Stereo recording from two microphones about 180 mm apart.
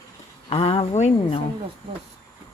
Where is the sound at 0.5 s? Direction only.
30° left (ahead or behind).